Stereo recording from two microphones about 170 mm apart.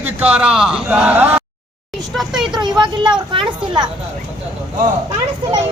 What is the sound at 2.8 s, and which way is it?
Speech, 25° right (ahead or behind).